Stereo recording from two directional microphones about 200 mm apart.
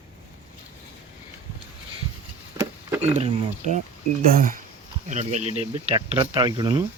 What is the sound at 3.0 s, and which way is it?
Speech, 35° right (ahead or behind).